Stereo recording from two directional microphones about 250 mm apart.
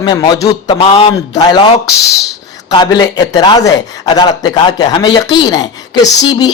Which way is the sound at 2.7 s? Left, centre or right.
Centre.